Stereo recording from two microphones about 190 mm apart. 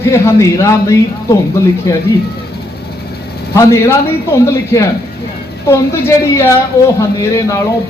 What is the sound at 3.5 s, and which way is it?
Speech, 15° left (ahead or behind).